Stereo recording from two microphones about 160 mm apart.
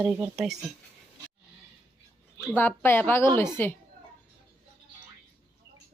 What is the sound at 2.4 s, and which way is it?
A woman's voice, 15° left (ahead or behind).